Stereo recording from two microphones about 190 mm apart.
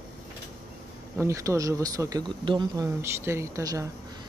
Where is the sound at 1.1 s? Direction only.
15° right (ahead or behind).